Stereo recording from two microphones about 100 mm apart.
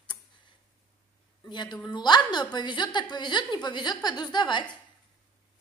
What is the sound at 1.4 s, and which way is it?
A woman's voice, 50° left (ahead or behind).